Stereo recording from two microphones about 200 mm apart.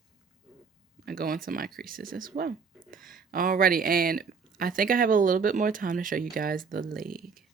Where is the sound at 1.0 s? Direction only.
45° right (ahead or behind).